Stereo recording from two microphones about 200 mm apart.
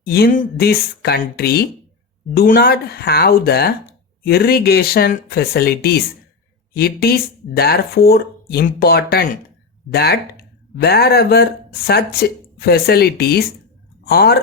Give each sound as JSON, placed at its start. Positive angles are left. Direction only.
{"t": 0.0, "sound": "speech", "side_deg": 50}